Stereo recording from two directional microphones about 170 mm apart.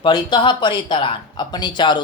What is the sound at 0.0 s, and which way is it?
Speech, 25° left (ahead or behind).